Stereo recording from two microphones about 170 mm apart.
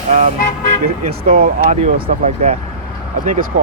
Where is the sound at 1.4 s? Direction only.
45° right (ahead or behind).